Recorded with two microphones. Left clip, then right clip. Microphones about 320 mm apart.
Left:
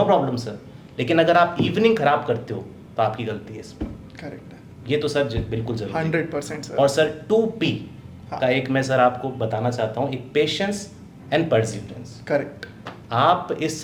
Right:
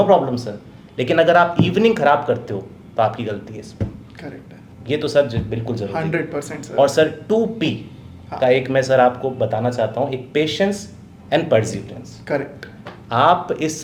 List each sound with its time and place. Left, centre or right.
0.1 s speech: right
4.9 s speech: right
5.9 s speech: centre
6.7 s speech: right
12.3 s speech: centre
13.1 s speech: right